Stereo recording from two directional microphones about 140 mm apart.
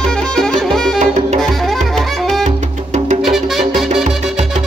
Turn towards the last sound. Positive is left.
turn(degrees=0)  # may be behind; listen again after turning